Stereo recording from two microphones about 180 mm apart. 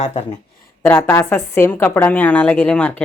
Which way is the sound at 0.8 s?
10° left (ahead or behind).